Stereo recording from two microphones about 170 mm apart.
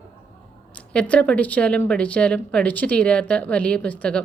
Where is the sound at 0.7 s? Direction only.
10° left (ahead or behind).